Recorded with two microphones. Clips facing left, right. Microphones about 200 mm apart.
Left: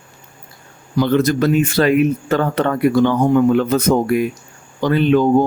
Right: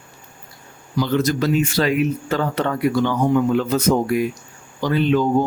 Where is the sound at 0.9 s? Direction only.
55° left (ahead or behind).